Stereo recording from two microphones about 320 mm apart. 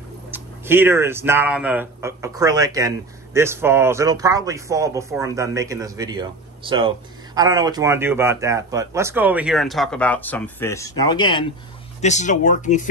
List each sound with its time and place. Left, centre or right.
0.3 s speech: centre; by 12.8 s left